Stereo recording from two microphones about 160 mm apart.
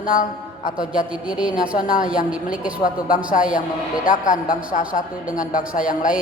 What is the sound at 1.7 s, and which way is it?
Speech, 60° left (ahead or behind).